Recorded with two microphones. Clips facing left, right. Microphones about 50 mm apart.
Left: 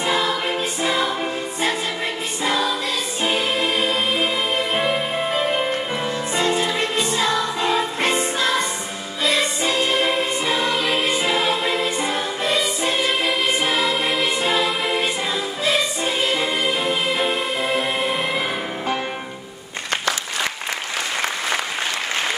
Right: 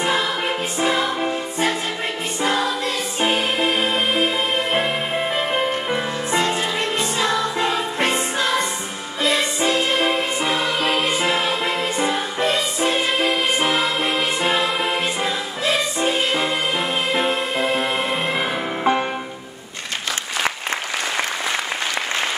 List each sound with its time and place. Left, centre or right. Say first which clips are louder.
0.0 s music: even; right
2.4 s music: right 1 dB; right
4.7 s music: even; centre
5.9 s music: right 2 dB; right
10.5 s music: even; right
12.1 s music: right 1 dB; centre
12.8 s music: right 1 dB; right
18.0 s music: even; right